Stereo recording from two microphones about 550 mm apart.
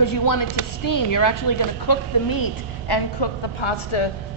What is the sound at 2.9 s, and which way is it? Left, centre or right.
A woman's voice, left.